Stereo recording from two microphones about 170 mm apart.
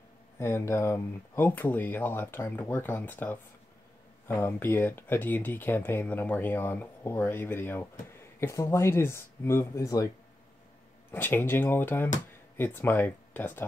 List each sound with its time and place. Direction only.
0.4 s speech: 15° left (ahead or behind)
11.1 s speech: 10° left (ahead or behind)